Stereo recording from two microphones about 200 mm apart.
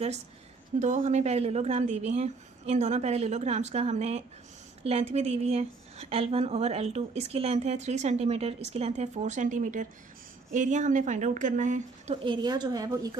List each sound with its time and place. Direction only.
0.8 s a woman's voice: 35° right (ahead or behind); by 13.1 s 20° right (ahead or behind)